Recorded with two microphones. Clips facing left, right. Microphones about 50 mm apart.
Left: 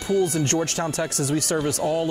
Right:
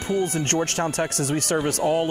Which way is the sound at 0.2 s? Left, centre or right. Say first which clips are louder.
Left 1 dB; right.